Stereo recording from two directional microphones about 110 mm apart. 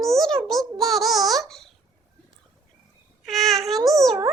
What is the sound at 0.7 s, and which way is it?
Child singing, centre (ahead or behind).